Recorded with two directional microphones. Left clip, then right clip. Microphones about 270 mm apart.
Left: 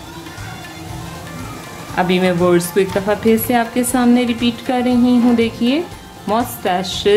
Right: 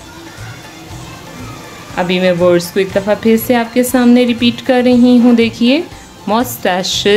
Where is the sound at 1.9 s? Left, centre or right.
Centre.